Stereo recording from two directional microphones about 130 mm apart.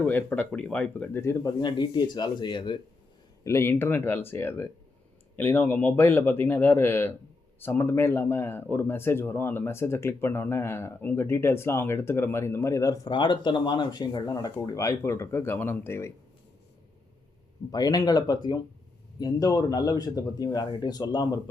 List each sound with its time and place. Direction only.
0.0 s speech: 15° left (ahead or behind)
1.5 s speech: 35° left (ahead or behind)
3.4 s speech: 20° left (ahead or behind)
17.7 s speech: 30° left (ahead or behind)